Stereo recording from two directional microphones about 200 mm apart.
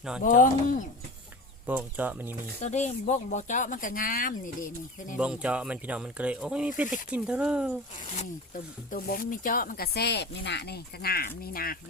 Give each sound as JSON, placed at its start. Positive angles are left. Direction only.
{"t": 0.2, "sound": "speech", "side_deg": 40}
{"t": 1.6, "sound": "speech", "side_deg": -10}
{"t": 2.6, "sound": "speech", "side_deg": 35}
{"t": 5.1, "sound": "speech", "side_deg": -5}
{"t": 8.0, "sound": "speech", "side_deg": 35}